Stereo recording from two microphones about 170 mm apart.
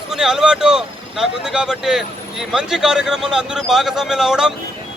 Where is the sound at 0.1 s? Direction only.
5° right (ahead or behind).